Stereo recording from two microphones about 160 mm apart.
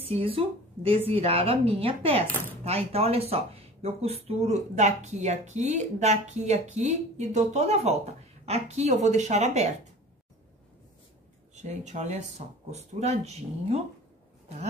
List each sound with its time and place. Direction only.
0.0 s a woman's voice: 35° right (ahead or behind)
11.5 s speech: 45° right (ahead or behind)